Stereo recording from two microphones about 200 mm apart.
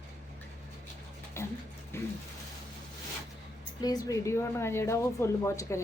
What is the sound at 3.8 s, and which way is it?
A woman's voice, 20° left (ahead or behind).